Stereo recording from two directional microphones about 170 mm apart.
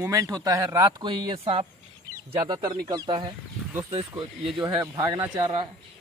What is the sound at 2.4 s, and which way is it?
Speech, 25° right (ahead or behind).